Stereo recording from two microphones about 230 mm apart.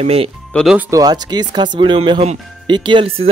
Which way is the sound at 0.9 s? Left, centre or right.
Centre.